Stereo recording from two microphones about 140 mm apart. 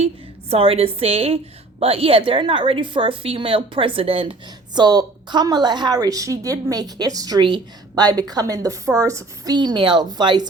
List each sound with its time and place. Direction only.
0.5 s a woman's voice: 45° right (ahead or behind)